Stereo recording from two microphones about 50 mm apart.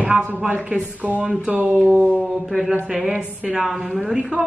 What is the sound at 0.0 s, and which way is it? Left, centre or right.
Speech, right.